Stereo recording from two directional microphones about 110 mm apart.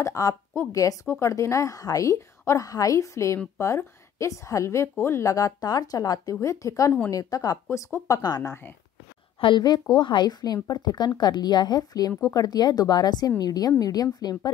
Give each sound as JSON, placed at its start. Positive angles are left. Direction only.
{"t": 0.0, "sound": "a woman's voice", "side_deg": 30}